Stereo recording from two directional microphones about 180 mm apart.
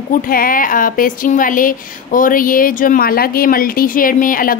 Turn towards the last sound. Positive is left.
turn(degrees=50)  # may be behind; listen again after turning